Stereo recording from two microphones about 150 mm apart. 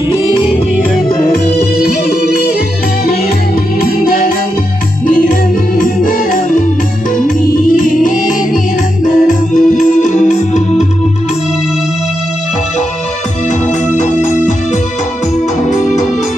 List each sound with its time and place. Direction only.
2.0 s music: 90° left
4.0 s music: 75° left (ahead or behind)
7.4 s music: 65° left (ahead or behind)
13.9 s music: 55° left (ahead or behind)